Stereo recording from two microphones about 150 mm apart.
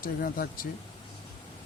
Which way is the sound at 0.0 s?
70° left (ahead or behind).